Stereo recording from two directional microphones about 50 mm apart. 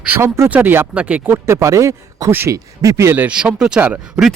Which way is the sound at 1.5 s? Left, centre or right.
Right.